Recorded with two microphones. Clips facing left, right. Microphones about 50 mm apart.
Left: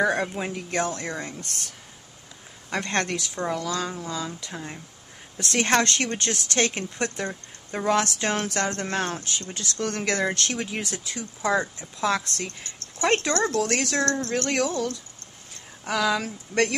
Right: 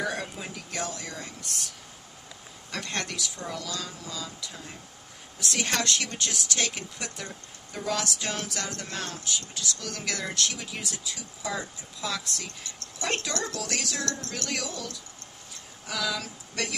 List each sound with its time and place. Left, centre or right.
0.0 s speech: left
2.7 s speech: left